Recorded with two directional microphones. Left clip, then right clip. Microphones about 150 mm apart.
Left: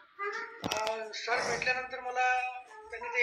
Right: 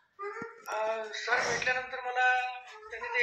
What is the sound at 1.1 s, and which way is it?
Speech, 10° left (ahead or behind).